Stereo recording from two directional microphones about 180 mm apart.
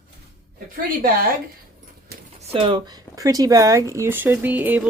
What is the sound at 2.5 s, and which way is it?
Speech, 30° right (ahead or behind).